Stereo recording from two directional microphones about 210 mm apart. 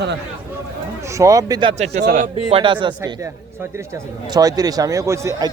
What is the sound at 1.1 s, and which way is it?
Speech, 15° right (ahead or behind).